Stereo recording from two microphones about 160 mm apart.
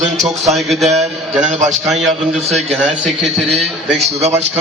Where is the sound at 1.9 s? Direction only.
Centre (ahead or behind).